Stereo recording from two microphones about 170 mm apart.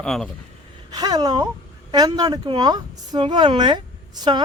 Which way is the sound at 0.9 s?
20° right (ahead or behind).